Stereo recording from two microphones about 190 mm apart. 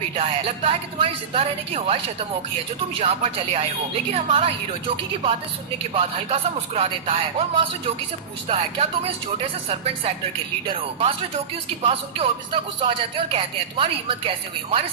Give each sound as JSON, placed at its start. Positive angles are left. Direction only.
{"t": 0.2, "sound": "speech", "side_deg": -30}
{"t": 3.0, "sound": "speech", "side_deg": -30}
{"t": 5.9, "sound": "speech", "side_deg": -30}